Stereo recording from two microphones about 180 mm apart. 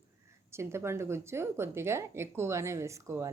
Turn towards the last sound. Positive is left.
turn(degrees=-15)  # may be behind; listen again after turning